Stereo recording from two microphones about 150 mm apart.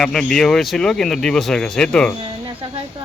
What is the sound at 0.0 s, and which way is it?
Speech, 5° left (ahead or behind).